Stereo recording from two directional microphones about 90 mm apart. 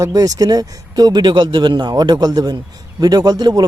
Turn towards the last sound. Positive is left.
turn(degrees=-50)  # may be behind; listen again after turning